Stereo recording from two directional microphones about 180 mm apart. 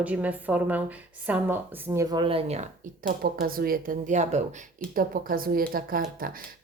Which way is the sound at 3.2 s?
55° right (ahead or behind).